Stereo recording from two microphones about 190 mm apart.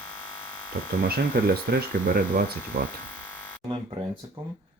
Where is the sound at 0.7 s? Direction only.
50° right (ahead or behind).